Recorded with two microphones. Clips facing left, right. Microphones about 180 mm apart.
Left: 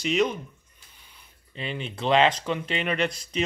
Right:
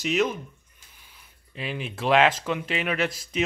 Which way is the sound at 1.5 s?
5° right (ahead or behind).